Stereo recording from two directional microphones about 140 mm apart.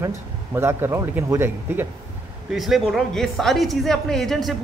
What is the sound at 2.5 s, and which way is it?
A man's voice, centre (ahead or behind).